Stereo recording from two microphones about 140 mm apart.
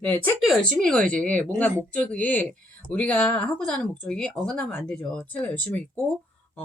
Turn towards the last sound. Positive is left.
turn(degrees=10)  # may be behind; listen again after turning